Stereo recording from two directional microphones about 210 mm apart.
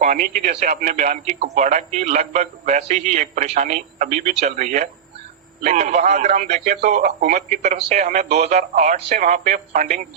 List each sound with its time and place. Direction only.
0.0 s a man's voice: 40° right (ahead or behind)